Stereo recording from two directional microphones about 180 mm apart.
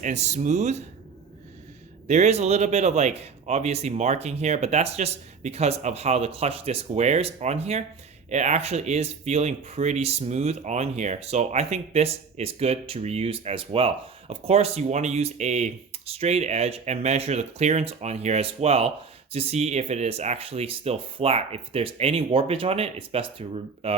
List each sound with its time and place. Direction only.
0.0 s speech: 40° right (ahead or behind)
2.0 s speech: 40° right (ahead or behind)